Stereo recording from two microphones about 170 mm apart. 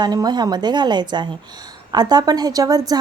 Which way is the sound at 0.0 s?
25° right (ahead or behind).